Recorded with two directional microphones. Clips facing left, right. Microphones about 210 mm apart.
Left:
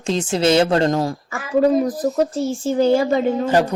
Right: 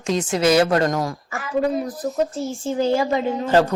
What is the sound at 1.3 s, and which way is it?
A child's voice, 40° left (ahead or behind).